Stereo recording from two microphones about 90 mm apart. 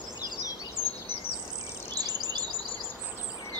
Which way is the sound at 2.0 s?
50° right (ahead or behind).